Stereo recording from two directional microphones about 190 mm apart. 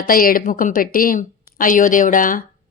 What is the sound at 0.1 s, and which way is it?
Speech, 50° left (ahead or behind).